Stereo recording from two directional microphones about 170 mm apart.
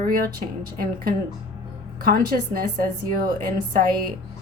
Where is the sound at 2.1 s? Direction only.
60° right (ahead or behind).